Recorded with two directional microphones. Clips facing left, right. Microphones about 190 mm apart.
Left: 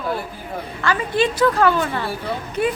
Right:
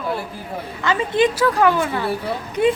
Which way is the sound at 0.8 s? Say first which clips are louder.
Right 2 dB; 20° right (ahead or behind).